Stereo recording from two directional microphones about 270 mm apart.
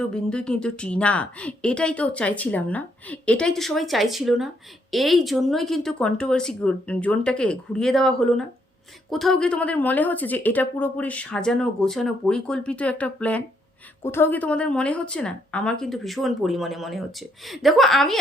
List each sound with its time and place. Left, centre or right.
0.1 s a woman's voice: centre